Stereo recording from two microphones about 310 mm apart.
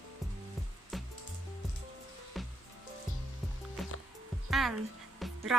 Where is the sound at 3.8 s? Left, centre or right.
Centre.